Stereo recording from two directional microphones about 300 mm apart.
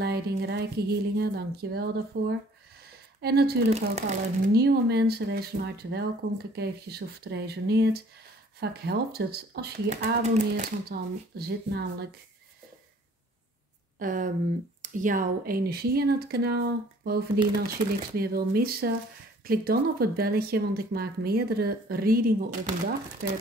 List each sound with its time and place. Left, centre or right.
0.0 s a woman's voice: right
13.9 s speech: right